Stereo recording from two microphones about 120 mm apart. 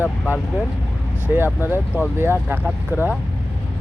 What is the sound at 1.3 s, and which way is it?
Speech, 15° right (ahead or behind).